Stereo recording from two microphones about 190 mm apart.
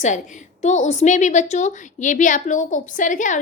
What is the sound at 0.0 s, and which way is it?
A woman's voice, 40° left (ahead or behind).